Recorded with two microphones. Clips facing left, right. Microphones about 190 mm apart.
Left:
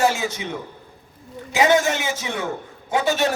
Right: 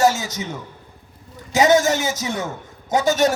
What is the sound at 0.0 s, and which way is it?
Speech, 40° right (ahead or behind).